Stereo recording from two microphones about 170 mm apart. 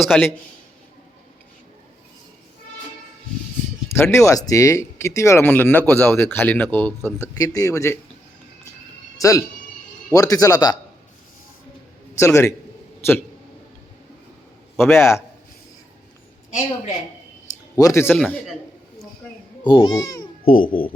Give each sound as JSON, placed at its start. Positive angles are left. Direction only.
{"t": 0.1, "sound": "a man's voice", "side_deg": 5}
{"t": 3.9, "sound": "speech", "side_deg": 15}
{"t": 9.1, "sound": "speech", "side_deg": 20}
{"t": 12.1, "sound": "a man's voice", "side_deg": 15}
{"t": 14.8, "sound": "a man's voice", "side_deg": 0}
{"t": 17.7, "sound": "speech", "side_deg": 15}
{"t": 18.2, "sound": "a man's voice", "side_deg": 0}
{"t": 19.6, "sound": "speech", "side_deg": 25}
{"t": 20.4, "sound": "speech", "side_deg": 55}